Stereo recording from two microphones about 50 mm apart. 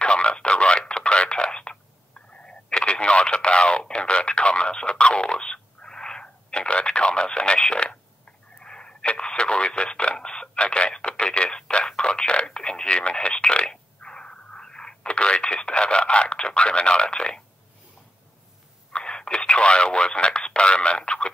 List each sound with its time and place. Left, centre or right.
0.0 s telephone: left
2.3 s radio: centre
18.9 s telephone: centre